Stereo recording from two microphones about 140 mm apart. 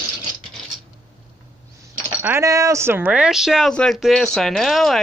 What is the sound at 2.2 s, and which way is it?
Speech, 20° right (ahead or behind).